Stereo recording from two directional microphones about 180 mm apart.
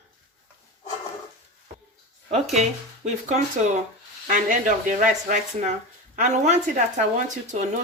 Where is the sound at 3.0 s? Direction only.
40° right (ahead or behind).